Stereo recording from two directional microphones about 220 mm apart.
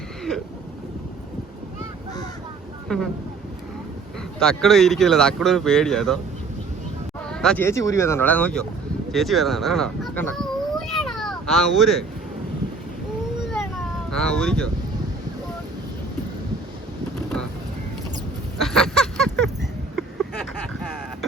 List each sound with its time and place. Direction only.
4.4 s speech: 5° left (ahead or behind)
7.3 s a child's voice: 5° left (ahead or behind)
14.1 s speech: 5° left (ahead or behind)
18.6 s honk: 5° left (ahead or behind)